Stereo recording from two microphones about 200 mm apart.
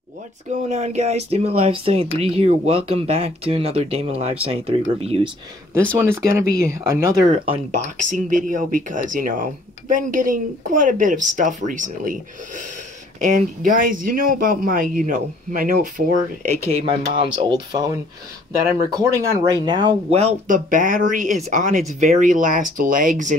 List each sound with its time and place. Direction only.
0.5 s speech: 35° right (ahead or behind)
5.9 s speech: 10° right (ahead or behind); by 15.9 s 40° right (ahead or behind)
16.4 s speech: 30° right (ahead or behind)
17.4 s speech: 20° right (ahead or behind); by 23.3 s 40° right (ahead or behind)